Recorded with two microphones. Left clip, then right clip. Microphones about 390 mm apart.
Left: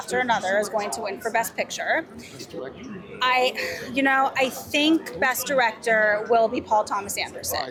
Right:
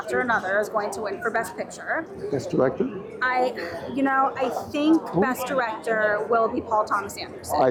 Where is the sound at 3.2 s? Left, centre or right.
Left.